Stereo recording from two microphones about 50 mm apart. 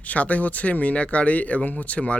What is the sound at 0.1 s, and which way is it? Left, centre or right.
Speech, left.